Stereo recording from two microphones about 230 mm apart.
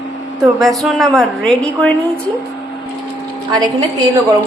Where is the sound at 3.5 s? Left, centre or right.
Centre.